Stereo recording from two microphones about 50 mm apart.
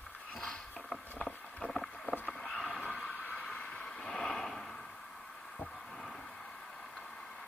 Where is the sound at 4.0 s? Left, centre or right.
Centre.